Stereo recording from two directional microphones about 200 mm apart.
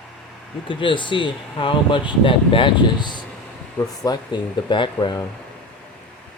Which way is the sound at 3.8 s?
5° left (ahead or behind).